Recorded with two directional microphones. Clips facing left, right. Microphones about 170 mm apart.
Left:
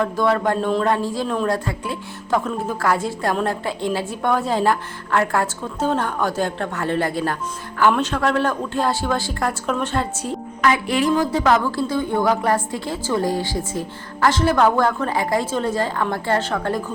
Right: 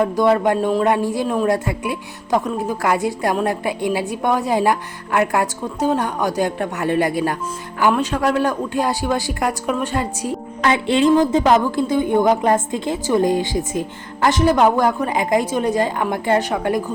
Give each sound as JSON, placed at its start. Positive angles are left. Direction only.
{"t": 0.0, "sound": "a woman's voice", "side_deg": -15}
{"t": 10.6, "sound": "a woman's voice", "side_deg": -25}